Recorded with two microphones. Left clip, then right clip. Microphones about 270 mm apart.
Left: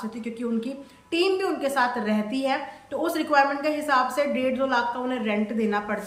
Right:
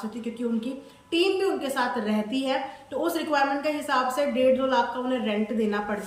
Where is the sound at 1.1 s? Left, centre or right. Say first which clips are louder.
Even; centre.